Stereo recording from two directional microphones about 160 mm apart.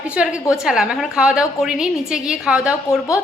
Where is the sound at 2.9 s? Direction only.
20° left (ahead or behind).